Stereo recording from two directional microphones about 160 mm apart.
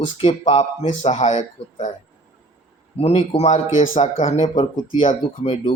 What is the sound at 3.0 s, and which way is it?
A man's voice, 40° left (ahead or behind).